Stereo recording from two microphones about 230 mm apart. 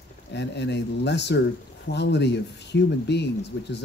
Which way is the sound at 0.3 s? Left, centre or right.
Left.